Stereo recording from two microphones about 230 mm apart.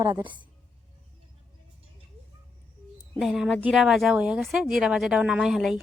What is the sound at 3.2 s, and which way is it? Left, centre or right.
Speech, centre.